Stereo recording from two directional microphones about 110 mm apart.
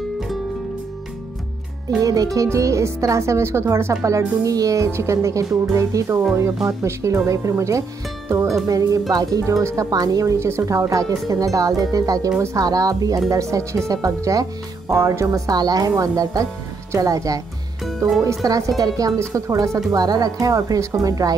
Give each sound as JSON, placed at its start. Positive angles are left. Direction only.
{"t": 2.0, "sound": "speech", "side_deg": -35}
{"t": 17.8, "sound": "speech", "side_deg": 0}
{"t": 18.2, "sound": "speech", "side_deg": -30}